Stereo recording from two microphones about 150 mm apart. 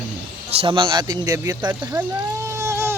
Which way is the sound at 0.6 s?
35° right (ahead or behind).